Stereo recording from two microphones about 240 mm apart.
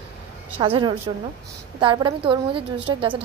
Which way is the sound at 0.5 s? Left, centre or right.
Right.